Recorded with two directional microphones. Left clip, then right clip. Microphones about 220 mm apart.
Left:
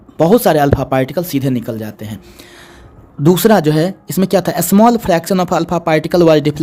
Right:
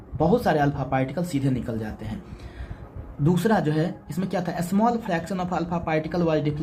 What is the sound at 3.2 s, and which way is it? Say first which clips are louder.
Speech: left 12 dB; 50° left (ahead or behind).